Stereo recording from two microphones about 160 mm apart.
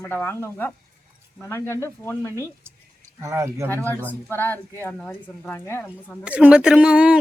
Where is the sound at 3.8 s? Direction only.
10° left (ahead or behind).